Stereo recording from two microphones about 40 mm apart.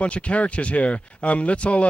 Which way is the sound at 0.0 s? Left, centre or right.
Left.